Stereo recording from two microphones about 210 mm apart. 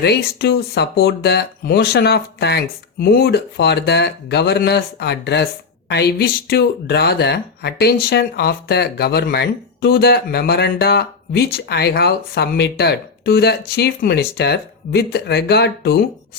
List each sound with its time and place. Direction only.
0.0 s speech: 50° left (ahead or behind)